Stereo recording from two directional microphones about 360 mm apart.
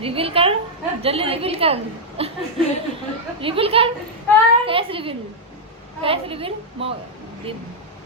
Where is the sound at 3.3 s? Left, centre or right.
Centre.